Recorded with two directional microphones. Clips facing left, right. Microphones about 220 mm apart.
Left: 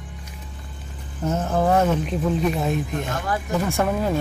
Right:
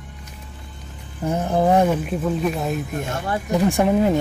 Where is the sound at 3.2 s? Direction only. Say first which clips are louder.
Right 7 dB; 20° right (ahead or behind).